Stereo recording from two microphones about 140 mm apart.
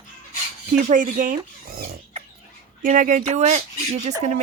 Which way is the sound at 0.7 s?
70° right (ahead or behind).